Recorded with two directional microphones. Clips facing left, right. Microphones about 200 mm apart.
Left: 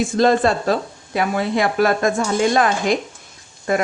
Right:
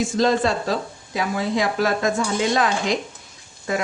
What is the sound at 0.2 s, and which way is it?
Speech, 55° left (ahead or behind).